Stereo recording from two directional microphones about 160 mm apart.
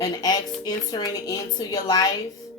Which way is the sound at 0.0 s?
25° left (ahead or behind).